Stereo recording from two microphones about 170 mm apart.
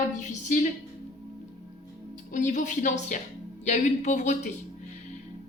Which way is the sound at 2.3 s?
50° left (ahead or behind).